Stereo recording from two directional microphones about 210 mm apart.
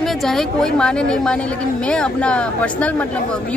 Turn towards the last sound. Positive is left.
turn(degrees=5)  # may be behind; listen again after turning